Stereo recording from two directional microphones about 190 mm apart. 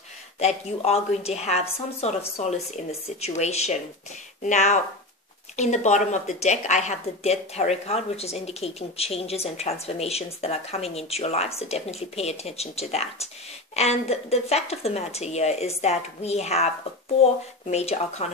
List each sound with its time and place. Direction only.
0.4 s a woman's voice: 35° left (ahead or behind)